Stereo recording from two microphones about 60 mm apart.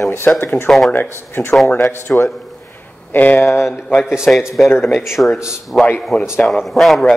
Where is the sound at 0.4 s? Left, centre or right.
Left.